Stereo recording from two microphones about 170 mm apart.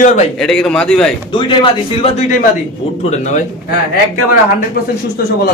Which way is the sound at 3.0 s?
45° left (ahead or behind).